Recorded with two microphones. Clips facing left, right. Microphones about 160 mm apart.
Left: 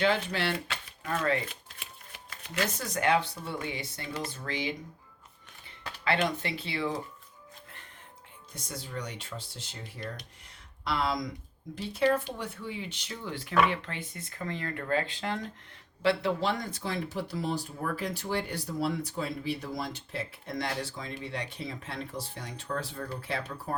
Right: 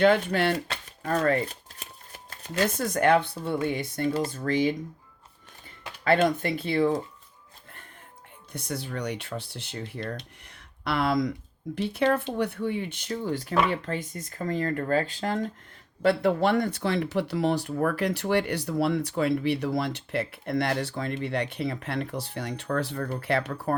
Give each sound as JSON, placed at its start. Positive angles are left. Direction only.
{"t": 0.0, "sound": "speech", "side_deg": -50}
{"t": 0.7, "sound": "shuffling cards", "side_deg": -40}
{"t": 2.6, "sound": "speech", "side_deg": -55}
{"t": 6.1, "sound": "speech", "side_deg": -50}
{"t": 8.5, "sound": "speech", "side_deg": -65}
{"t": 10.5, "sound": "a sound", "side_deg": -60}
{"t": 11.9, "sound": "speech", "side_deg": -65}
{"t": 16.0, "sound": "speech", "side_deg": -55}